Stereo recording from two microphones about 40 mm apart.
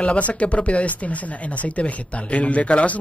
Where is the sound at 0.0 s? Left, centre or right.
Left.